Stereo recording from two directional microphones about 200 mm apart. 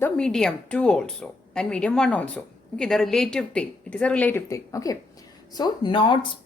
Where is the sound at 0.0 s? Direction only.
5° left (ahead or behind).